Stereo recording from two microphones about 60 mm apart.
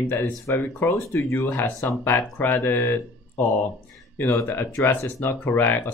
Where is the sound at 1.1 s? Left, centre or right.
Left.